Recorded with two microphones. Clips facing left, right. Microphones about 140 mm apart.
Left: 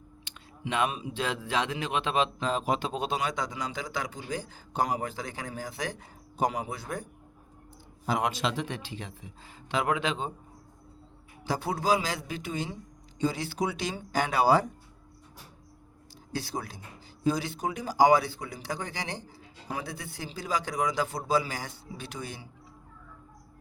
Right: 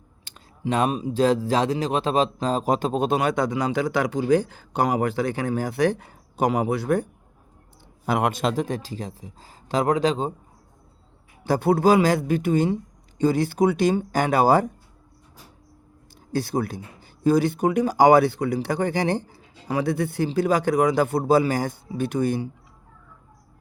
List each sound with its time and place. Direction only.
0.3 s speech: 40° right (ahead or behind)
11.4 s speech: 55° right (ahead or behind)
16.3 s speech: 55° right (ahead or behind)